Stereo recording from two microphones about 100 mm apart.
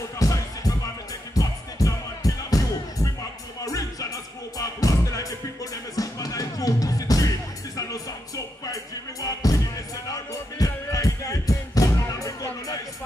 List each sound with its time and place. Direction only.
0.2 s music: 35° left (ahead or behind)
9.2 s music: 35° left (ahead or behind)